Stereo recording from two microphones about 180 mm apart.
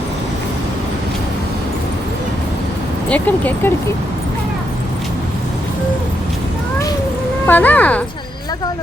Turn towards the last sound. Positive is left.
turn(degrees=10)  # may be behind; listen again after turning